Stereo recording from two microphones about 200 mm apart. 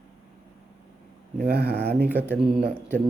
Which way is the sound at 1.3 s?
50° right (ahead or behind).